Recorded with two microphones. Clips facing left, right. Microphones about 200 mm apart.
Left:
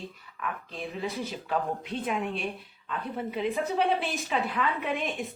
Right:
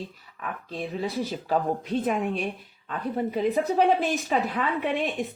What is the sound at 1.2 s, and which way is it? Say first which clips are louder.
A woman's voice: right 6 dB; 40° right (ahead or behind).